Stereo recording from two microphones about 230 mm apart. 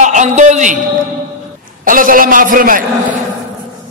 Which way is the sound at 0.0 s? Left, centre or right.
Right.